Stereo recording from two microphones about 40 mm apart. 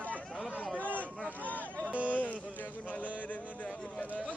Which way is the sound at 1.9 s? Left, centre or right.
Right.